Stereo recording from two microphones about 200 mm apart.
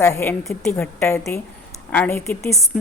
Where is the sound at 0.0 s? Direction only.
10° left (ahead or behind).